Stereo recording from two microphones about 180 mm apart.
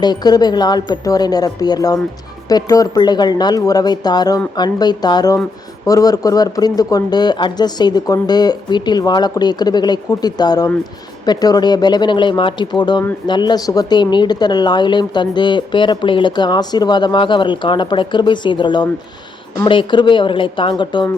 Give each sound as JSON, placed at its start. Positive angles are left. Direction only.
{"t": 0.0, "sound": "a woman's voice", "side_deg": 25}